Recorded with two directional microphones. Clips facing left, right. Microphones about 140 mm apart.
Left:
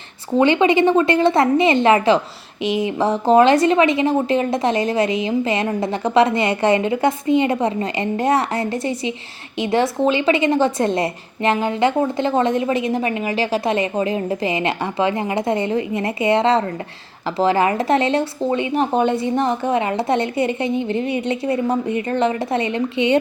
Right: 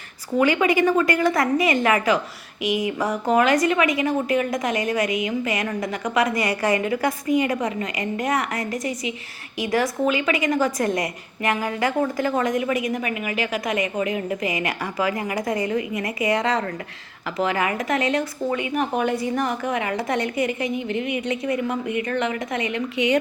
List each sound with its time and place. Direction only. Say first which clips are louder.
0.3 s a woman's voice: left 4 dB; 25° left (ahead or behind)